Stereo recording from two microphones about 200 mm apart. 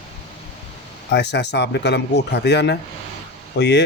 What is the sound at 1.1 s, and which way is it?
Speech, 60° left (ahead or behind).